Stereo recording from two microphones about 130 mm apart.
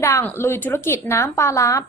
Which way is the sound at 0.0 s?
20° left (ahead or behind).